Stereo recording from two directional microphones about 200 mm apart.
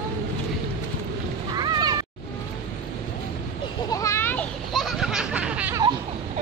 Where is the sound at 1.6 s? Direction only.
20° right (ahead or behind).